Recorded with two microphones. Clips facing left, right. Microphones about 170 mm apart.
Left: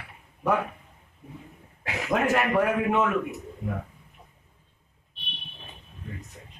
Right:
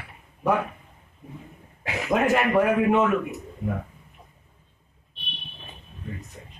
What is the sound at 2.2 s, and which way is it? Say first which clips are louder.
Speech: right 3 dB; 5° right (ahead or behind).